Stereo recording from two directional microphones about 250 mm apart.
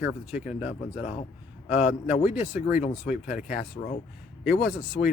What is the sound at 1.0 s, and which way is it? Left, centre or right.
Speech, left.